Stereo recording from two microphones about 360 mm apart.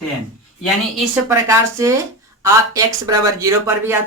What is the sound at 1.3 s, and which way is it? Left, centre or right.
Speech, centre.